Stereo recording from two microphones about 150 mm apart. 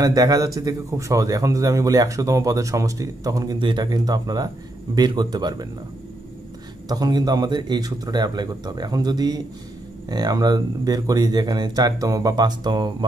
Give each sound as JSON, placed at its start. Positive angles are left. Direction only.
{"t": 0.0, "sound": "a man's voice", "side_deg": -25}
{"t": 6.9, "sound": "a man's voice", "side_deg": -25}